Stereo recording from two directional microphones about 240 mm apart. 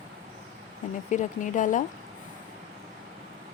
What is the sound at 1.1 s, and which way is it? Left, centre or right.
Speech, left.